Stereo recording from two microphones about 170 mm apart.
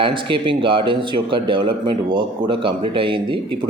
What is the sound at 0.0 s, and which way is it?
A man's voice, 30° right (ahead or behind).